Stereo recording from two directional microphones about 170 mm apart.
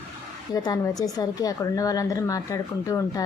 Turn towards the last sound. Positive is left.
turn(degrees=20)  # may be behind; listen again after turning